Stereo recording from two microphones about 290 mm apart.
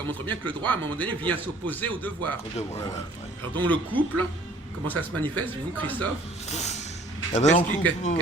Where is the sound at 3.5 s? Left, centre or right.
Centre.